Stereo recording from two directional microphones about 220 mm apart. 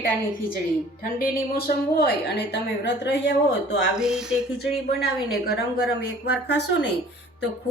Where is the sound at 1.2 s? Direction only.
45° left (ahead or behind).